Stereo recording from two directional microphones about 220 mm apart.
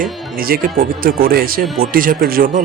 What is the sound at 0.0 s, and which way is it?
Speech, 40° right (ahead or behind).